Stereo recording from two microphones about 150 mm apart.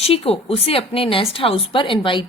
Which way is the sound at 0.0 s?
40° left (ahead or behind).